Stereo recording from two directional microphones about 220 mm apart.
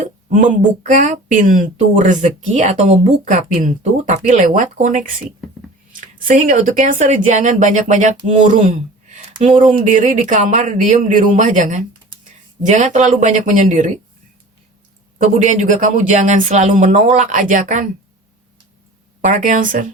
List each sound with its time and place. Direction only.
0.3 s speech: 35° right (ahead or behind)
9.7 s speech: 35° right (ahead or behind)
15.2 s speech: 35° right (ahead or behind)
19.2 s speech: 35° right (ahead or behind)